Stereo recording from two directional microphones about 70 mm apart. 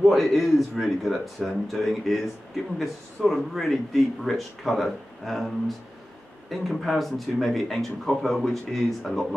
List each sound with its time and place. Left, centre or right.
0.0 s speech: centre
6.5 s speech: centre